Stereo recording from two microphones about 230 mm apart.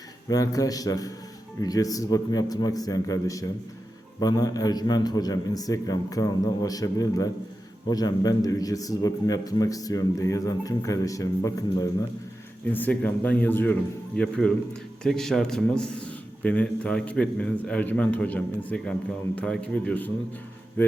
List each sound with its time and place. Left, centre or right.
0.3 s a man's voice: centre